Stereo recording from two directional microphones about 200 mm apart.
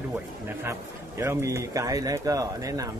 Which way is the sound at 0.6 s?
15° right (ahead or behind).